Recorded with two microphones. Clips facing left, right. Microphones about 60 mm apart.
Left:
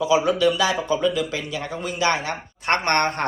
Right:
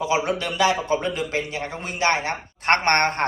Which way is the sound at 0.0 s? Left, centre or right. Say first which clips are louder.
Left 5 dB; right.